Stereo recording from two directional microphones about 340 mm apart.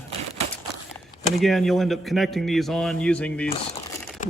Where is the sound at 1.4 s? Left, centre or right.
Centre.